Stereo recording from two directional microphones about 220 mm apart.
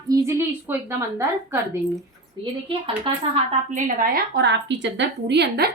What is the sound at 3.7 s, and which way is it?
A woman's voice, 40° right (ahead or behind).